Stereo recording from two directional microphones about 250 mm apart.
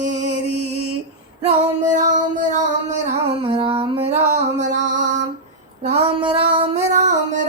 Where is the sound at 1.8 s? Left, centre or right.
Right.